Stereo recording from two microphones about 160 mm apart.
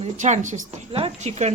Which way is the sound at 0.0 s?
50° right (ahead or behind).